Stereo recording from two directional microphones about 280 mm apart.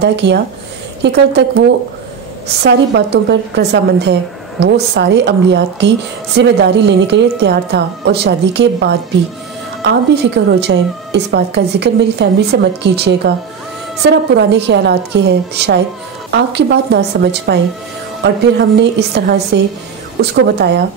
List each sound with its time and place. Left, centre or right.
0.0 s a woman's voice: right